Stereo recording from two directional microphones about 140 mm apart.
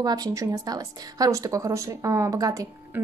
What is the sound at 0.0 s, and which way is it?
A woman's voice, 25° right (ahead or behind).